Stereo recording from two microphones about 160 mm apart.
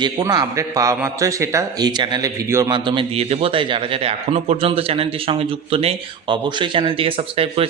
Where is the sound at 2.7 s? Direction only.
30° right (ahead or behind).